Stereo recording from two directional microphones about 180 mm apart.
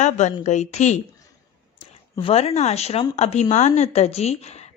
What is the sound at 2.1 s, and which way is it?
A woman's voice, 30° left (ahead or behind).